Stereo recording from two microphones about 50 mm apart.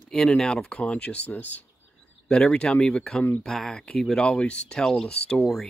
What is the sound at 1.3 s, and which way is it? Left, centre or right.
Speech, left.